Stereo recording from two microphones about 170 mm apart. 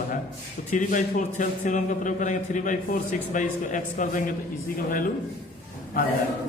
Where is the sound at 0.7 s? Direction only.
50° left (ahead or behind).